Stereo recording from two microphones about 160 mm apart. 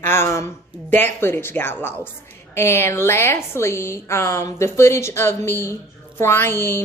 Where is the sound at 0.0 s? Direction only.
15° left (ahead or behind).